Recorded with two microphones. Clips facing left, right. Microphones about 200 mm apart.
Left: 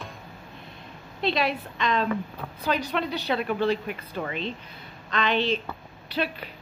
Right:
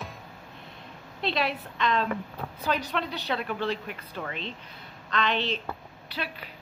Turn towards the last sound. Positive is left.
turn(degrees=25)  # may be behind; listen again after turning